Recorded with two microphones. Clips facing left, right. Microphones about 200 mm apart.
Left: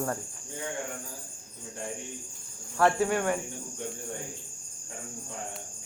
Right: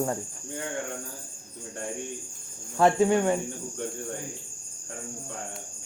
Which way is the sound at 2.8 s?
20° right (ahead or behind).